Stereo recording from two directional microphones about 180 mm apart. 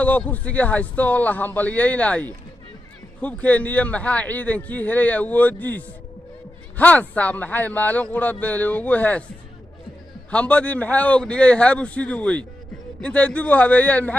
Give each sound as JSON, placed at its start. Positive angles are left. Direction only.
{"t": 0.0, "sound": "a man's voice", "side_deg": 10}
{"t": 10.3, "sound": "a man's voice", "side_deg": 5}